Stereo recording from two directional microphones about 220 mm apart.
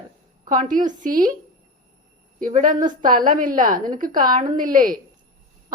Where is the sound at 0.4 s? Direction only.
35° right (ahead or behind).